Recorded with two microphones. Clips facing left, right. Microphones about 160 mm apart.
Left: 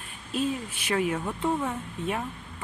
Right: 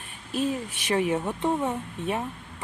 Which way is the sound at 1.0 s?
20° right (ahead or behind).